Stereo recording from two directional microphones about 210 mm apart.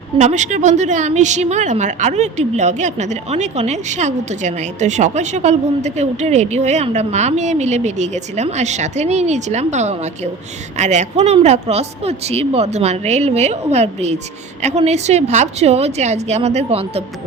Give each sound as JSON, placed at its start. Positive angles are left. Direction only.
{"t": 0.2, "sound": "a woman's voice", "side_deg": -35}